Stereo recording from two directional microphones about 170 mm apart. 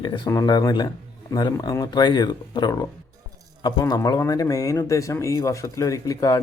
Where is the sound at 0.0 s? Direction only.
20° left (ahead or behind).